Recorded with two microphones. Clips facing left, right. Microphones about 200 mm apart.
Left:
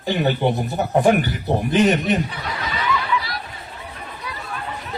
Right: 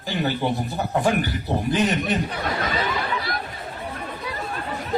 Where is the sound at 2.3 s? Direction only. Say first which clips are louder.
Right 3 dB; 50° right (ahead or behind).